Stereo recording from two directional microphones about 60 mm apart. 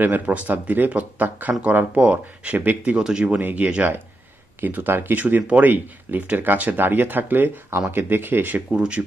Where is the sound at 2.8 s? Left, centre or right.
Centre.